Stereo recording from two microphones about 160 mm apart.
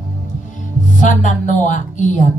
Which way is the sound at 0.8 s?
50° left (ahead or behind).